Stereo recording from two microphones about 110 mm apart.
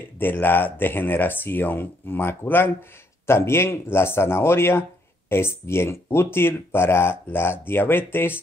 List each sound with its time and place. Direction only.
0.0 s speech: 20° left (ahead or behind)